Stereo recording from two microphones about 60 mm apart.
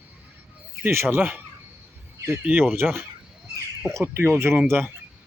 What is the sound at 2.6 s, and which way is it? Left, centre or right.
Speech, right.